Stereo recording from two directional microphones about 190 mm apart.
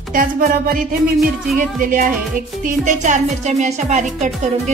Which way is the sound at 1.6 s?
45° right (ahead or behind).